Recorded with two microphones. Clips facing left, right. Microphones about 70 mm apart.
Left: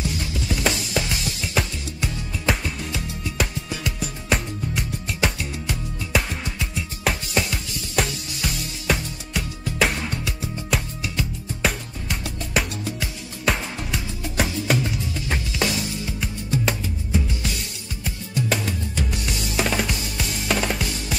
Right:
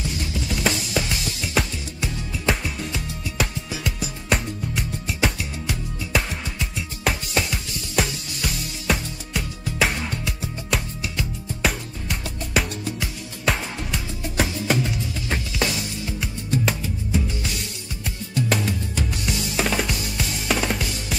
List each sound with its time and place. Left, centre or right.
0.7 s music: centre
18.5 s music: centre